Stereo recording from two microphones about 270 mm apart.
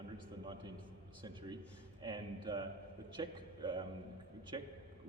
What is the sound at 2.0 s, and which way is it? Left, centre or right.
A man's voice, centre.